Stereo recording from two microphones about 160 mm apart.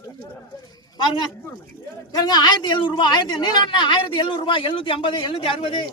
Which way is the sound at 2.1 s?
25° left (ahead or behind).